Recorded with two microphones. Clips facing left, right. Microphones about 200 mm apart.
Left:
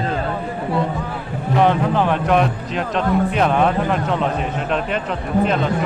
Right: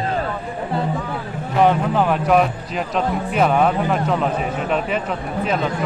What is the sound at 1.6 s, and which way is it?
A man's voice, 5° right (ahead or behind).